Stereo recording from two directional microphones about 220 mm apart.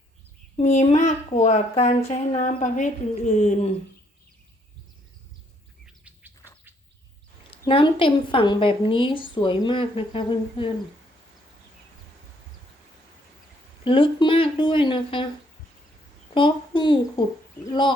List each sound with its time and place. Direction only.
0.5 s speech: 30° left (ahead or behind)
5.8 s bird: 5° right (ahead or behind)
7.5 s speech: 25° left (ahead or behind)
13.8 s speech: 25° left (ahead or behind)
16.3 s speech: 20° left (ahead or behind)